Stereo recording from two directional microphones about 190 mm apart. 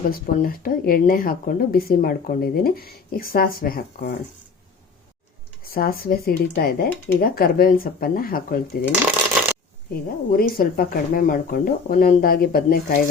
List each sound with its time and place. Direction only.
0.1 s speech: 45° left (ahead or behind)
5.7 s speech: 50° left (ahead or behind)
9.9 s speech: 50° left (ahead or behind)